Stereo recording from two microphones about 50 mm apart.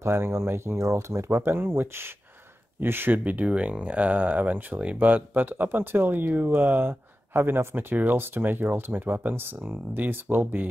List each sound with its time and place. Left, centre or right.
0.0 s speech: right
3.3 s speech: right